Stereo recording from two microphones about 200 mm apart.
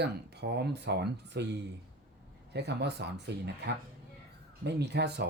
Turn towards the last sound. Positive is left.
turn(degrees=-55)  # may be behind; listen again after turning